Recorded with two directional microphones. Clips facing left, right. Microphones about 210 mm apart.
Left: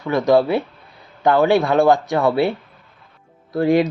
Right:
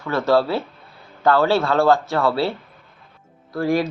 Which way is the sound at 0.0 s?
15° left (ahead or behind).